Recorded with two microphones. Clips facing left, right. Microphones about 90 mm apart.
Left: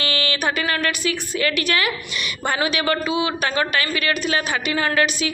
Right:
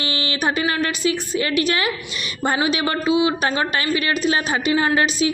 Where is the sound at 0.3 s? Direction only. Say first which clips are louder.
Right 4 dB; 30° right (ahead or behind).